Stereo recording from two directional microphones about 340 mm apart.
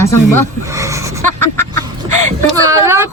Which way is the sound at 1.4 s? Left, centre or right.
Centre.